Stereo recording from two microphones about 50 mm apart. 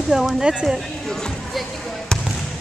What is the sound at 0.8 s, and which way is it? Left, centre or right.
Music, centre.